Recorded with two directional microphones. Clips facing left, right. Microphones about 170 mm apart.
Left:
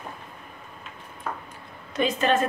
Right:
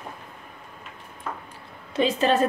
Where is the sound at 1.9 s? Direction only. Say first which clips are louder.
Right 2 dB; 30° right (ahead or behind).